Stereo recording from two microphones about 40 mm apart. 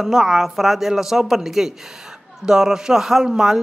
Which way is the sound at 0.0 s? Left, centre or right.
Centre.